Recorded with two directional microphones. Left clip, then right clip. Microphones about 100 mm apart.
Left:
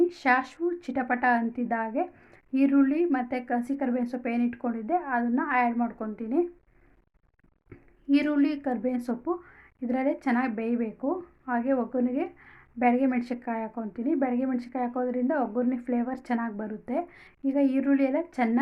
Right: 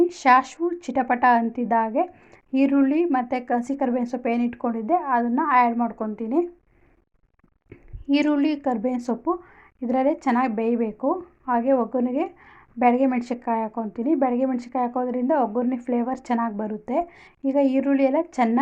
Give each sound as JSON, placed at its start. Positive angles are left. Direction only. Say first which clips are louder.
{"t": 0.0, "sound": "a woman's voice", "louder": "right 7 dB", "side_deg": -40}
{"t": 8.0, "sound": "a woman's voice", "louder": "right 4 dB", "side_deg": -35}